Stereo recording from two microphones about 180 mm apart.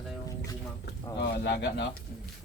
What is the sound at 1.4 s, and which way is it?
Speech, 70° left (ahead or behind).